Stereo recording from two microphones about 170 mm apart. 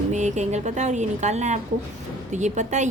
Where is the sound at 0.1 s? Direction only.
45° right (ahead or behind).